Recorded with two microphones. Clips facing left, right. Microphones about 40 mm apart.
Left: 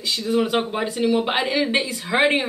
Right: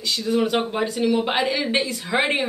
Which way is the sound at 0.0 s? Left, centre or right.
Centre.